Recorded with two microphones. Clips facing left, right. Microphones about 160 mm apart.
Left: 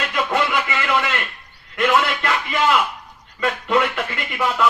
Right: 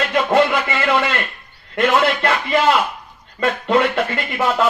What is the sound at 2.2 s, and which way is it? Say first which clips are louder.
Speech: right 4 dB; 40° right (ahead or behind).